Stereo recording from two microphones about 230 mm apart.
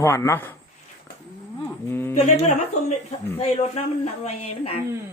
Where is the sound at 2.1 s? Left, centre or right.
Left.